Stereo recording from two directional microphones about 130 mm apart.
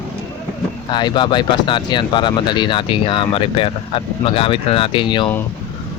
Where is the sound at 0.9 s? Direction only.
35° left (ahead or behind).